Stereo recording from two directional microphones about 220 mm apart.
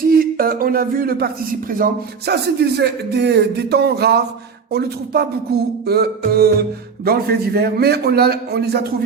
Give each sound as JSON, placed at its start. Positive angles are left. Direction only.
{"t": 0.0, "sound": "speech", "side_deg": -40}